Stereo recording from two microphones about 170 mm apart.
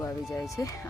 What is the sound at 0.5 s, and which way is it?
Speech, 20° left (ahead or behind).